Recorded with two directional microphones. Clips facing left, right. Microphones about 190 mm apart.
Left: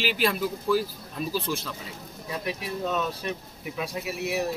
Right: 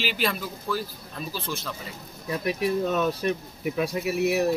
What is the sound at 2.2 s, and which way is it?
Speech, 55° right (ahead or behind).